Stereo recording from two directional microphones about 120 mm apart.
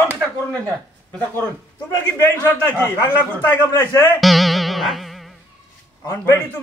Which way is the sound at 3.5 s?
20° left (ahead or behind).